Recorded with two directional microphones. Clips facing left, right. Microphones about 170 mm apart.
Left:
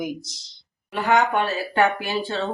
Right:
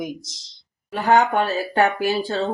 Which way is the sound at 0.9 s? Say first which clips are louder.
Right 2 dB; 40° right (ahead or behind).